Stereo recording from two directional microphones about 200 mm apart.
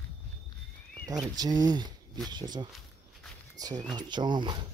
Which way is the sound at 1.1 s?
20° right (ahead or behind).